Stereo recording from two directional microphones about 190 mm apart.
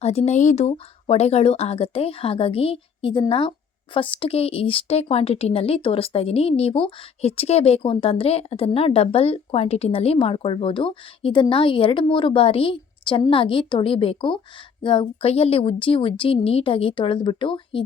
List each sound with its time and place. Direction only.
0.0 s speech: 35° left (ahead or behind)